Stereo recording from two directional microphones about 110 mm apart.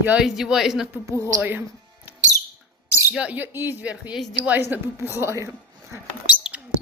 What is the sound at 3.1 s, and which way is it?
A woman's voice, 10° right (ahead or behind).